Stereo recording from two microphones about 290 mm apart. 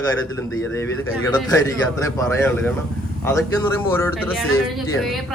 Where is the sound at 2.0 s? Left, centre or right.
Centre.